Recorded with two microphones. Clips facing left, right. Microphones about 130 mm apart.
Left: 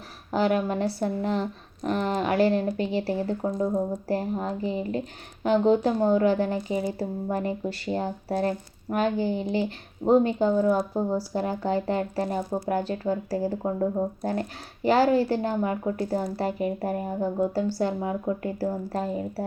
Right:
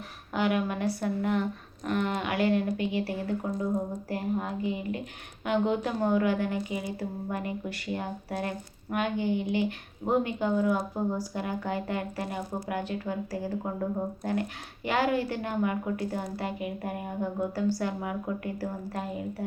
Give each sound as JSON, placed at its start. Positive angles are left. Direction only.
{"t": 0.3, "sound": "speech", "side_deg": 35}